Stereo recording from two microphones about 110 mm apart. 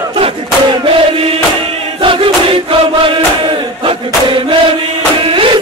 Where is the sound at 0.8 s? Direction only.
60° right (ahead or behind).